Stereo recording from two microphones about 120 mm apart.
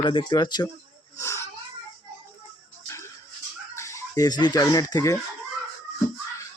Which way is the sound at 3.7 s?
25° left (ahead or behind).